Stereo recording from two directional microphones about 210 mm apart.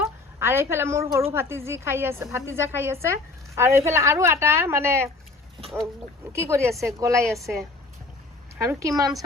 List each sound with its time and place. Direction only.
0.0 s a woman's voice: 10° right (ahead or behind)
6.3 s a woman's voice: 10° right (ahead or behind)
8.5 s a woman's voice: 15° right (ahead or behind)